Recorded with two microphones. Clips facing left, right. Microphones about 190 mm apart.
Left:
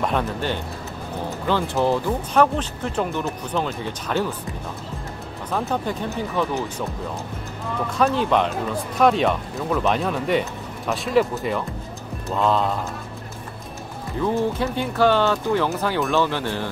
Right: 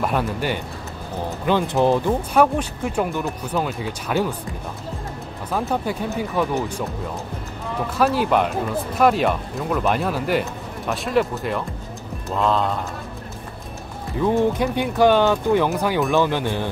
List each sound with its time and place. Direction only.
0.0 s speech: 5° right (ahead or behind)
5.5 s speech: 5° right (ahead or behind)
8.0 s speech: 5° right (ahead or behind)
14.6 s speech: 15° right (ahead or behind)